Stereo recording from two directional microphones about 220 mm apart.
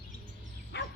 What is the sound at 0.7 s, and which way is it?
Dog, 50° left (ahead or behind).